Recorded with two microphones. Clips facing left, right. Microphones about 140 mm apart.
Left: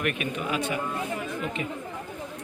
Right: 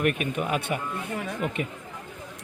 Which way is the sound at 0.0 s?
40° right (ahead or behind).